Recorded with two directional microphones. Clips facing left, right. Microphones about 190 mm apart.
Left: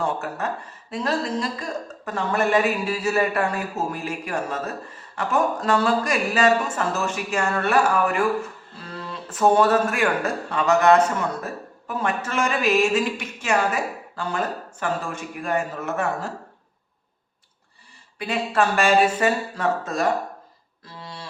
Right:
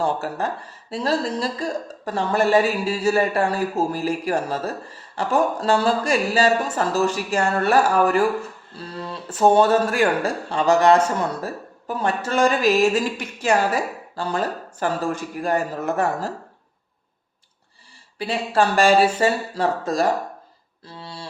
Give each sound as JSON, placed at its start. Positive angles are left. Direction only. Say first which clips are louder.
{"t": 0.0, "sound": "speech", "louder": "right 3 dB", "side_deg": -30}
{"t": 14.8, "sound": "speech", "louder": "right 4 dB", "side_deg": -35}
{"t": 18.2, "sound": "speech", "louder": "right 2 dB", "side_deg": -30}
{"t": 21.0, "sound": "music", "louder": "right 1 dB", "side_deg": -30}